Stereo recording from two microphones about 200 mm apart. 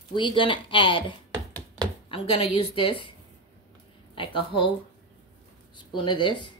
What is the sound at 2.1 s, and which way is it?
A woman's voice, 30° left (ahead or behind).